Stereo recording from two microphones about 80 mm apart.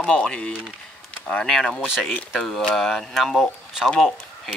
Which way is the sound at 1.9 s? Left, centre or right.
Centre.